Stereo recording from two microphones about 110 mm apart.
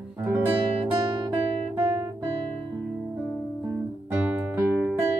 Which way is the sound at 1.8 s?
25° right (ahead or behind).